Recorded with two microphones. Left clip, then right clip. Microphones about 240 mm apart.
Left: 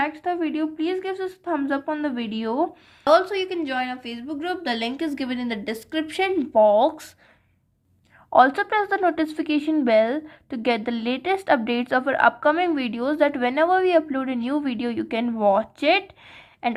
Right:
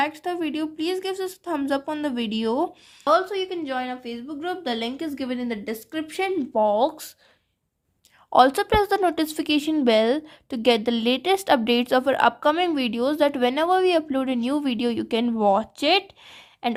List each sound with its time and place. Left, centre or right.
0.0 s a woman's voice: right
3.0 s a woman's voice: centre; by 7.1 s right
8.3 s a woman's voice: right